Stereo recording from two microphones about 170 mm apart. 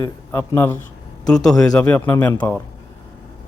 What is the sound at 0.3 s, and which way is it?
Speech, 15° left (ahead or behind).